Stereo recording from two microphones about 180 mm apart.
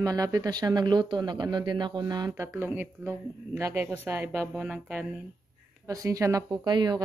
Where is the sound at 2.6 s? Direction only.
10° right (ahead or behind).